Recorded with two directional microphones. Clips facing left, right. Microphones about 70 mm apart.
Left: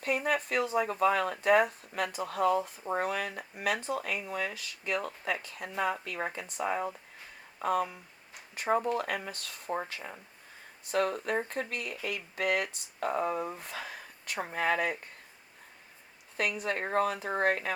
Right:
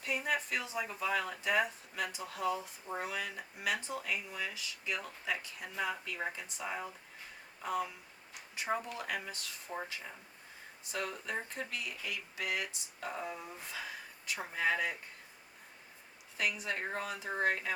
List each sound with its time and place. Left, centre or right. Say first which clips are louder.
0.0 s speech: left 5 dB; left
10.9 s speech: left 9 dB; left
16.4 s speech: left 4 dB; left